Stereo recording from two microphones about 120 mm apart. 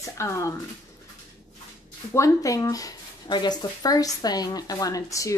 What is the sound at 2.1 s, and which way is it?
Speech, 25° left (ahead or behind).